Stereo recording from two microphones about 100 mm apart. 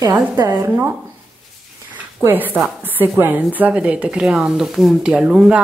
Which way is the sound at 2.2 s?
20° right (ahead or behind).